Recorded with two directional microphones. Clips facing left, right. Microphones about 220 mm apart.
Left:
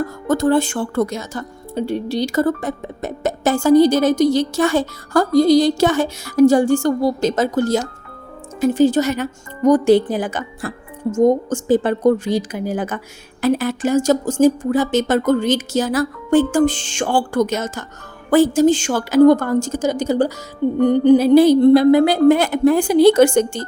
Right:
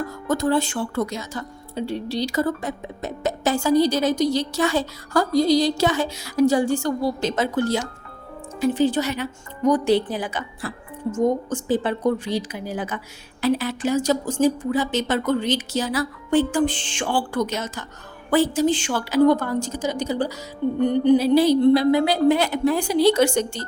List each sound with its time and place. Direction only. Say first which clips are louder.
0.3 s speech: left 5 dB; 50° left (ahead or behind)